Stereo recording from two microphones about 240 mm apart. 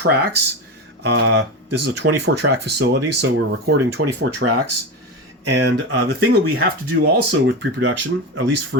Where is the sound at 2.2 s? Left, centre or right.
Right.